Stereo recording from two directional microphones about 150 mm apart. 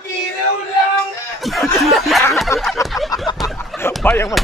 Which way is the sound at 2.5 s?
20° left (ahead or behind).